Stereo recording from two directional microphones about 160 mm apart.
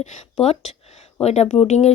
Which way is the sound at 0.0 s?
45° left (ahead or behind).